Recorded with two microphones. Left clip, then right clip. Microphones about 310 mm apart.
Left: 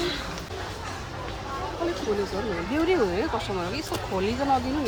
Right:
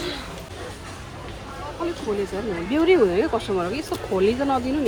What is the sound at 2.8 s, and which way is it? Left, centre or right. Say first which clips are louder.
Speech: right 7 dB; right.